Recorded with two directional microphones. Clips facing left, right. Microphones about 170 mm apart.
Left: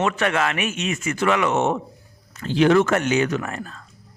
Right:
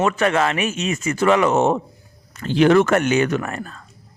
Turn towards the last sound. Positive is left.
turn(degrees=-55)  # may be behind; listen again after turning